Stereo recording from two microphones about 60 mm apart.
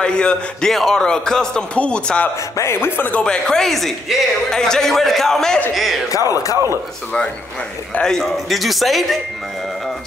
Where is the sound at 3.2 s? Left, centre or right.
Centre.